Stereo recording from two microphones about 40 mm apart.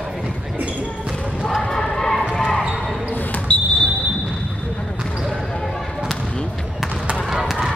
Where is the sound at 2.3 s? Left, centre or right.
Left.